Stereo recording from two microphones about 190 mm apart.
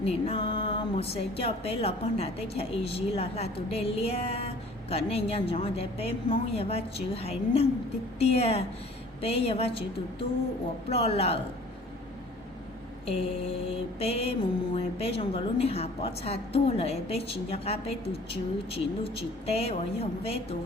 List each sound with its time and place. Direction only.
0.0 s a woman's voice: 30° left (ahead or behind)
13.1 s a woman's voice: 30° left (ahead or behind)